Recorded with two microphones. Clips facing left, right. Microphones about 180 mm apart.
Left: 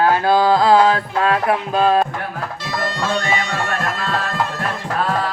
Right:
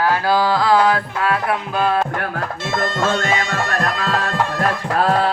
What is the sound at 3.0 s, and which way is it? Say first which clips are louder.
Music: right 1 dB; 45° right (ahead or behind).